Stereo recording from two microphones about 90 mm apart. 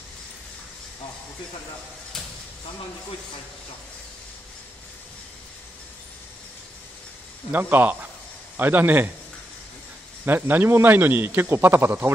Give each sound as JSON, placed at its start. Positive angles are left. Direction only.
{"t": 7.5, "sound": "a man's voice", "side_deg": -20}
{"t": 10.2, "sound": "a man's voice", "side_deg": -25}